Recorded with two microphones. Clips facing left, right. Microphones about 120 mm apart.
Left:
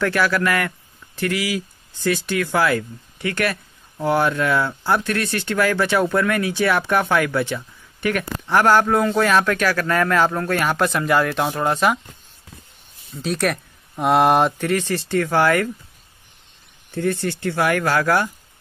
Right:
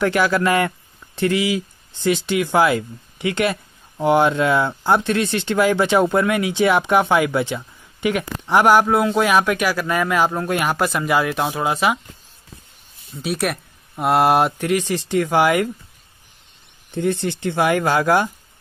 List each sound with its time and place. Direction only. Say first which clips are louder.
0.0 s speech: right 2 dB; 20° right (ahead or behind)
13.1 s speech: left 1 dB; 5° right (ahead or behind)
16.9 s speech: right 1 dB; 20° right (ahead or behind)